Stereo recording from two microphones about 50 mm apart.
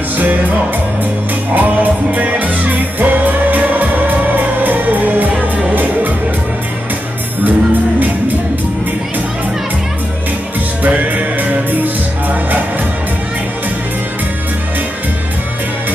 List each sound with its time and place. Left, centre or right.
1.5 s music: right
7.4 s music: right
10.8 s music: right